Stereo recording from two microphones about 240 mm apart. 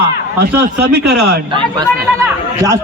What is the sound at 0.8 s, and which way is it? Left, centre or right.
Speech, right.